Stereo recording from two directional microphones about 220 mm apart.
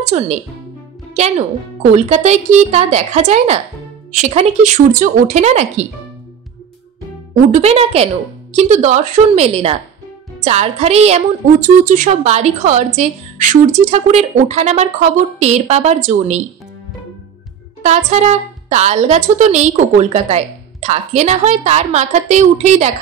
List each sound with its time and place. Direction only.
0.0 s a woman's voice: 30° right (ahead or behind)
2.0 s a woman's voice: 30° right (ahead or behind)
7.5 s a woman's voice: 25° right (ahead or behind)
17.8 s a woman's voice: 30° right (ahead or behind)